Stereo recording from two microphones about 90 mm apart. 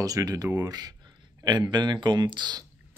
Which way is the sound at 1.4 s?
55° right (ahead or behind).